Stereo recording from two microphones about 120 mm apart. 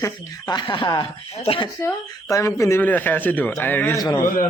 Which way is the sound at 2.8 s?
15° left (ahead or behind).